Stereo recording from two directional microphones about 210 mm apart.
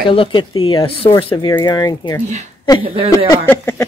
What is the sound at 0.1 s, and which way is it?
Speech, 25° left (ahead or behind).